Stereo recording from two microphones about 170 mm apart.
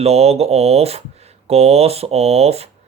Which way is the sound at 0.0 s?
35° right (ahead or behind).